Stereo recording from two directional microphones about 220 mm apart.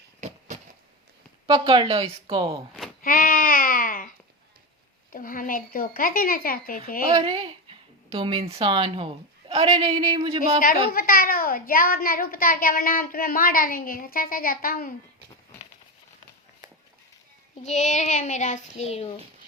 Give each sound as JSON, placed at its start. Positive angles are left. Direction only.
{"t": 0.2, "sound": "a sound", "side_deg": -30}
{"t": 1.5, "sound": "speech", "side_deg": -20}
{"t": 3.0, "sound": "a sound", "side_deg": 40}
{"t": 5.1, "sound": "a child's voice", "side_deg": 40}
{"t": 7.1, "sound": "a woman's voice", "side_deg": -20}
{"t": 10.6, "sound": "a child's voice", "side_deg": 40}
{"t": 17.6, "sound": "a child's voice", "side_deg": 30}